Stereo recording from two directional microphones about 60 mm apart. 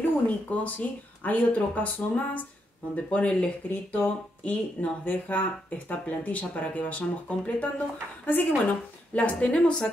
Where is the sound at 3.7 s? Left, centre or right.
Left.